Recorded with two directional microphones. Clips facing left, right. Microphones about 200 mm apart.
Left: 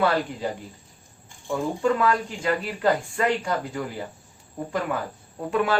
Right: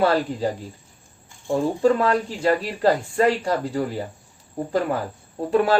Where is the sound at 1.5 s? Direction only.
35° right (ahead or behind).